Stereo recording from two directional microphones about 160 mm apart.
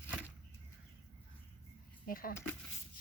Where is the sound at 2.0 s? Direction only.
65° left (ahead or behind).